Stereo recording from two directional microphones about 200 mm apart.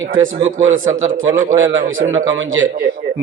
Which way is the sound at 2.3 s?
70° right (ahead or behind).